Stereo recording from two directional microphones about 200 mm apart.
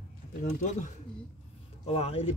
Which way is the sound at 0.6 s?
35° left (ahead or behind).